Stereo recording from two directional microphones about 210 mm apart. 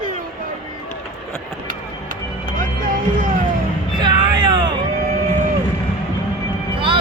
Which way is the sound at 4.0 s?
20° right (ahead or behind).